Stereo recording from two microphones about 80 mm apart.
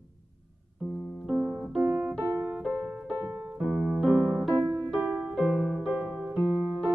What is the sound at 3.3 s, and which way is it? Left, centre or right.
Keyboard, centre.